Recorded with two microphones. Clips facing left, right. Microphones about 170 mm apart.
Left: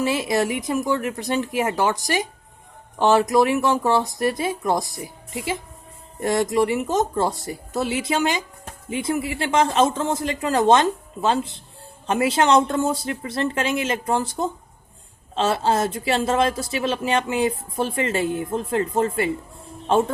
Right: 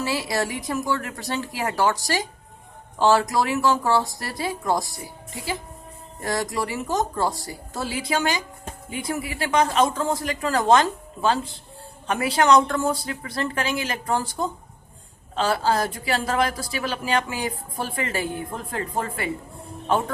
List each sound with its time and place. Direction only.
0.0 s a woman's voice: 20° left (ahead or behind)